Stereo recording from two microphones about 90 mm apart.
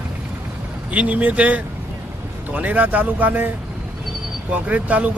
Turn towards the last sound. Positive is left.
turn(degrees=-15)  # may be behind; listen again after turning